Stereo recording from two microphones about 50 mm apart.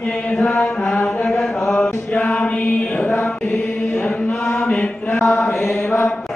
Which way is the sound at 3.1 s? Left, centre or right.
Left.